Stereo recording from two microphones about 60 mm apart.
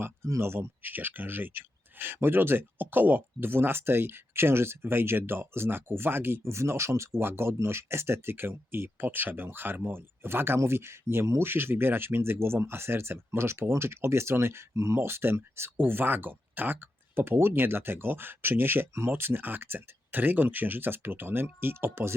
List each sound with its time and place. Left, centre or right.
0.4 s speech: right
14.9 s speech: right